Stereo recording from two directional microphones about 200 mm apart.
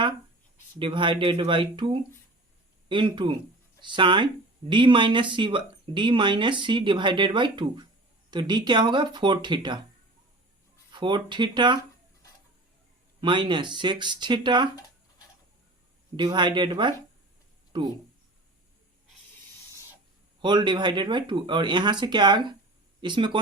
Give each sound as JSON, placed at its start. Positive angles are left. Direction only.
{"t": 0.8, "sound": "speech", "side_deg": -25}
{"t": 10.9, "sound": "speech", "side_deg": -25}
{"t": 13.2, "sound": "speech", "side_deg": -25}
{"t": 16.1, "sound": "speech", "side_deg": -25}
{"t": 20.4, "sound": "speech", "side_deg": -20}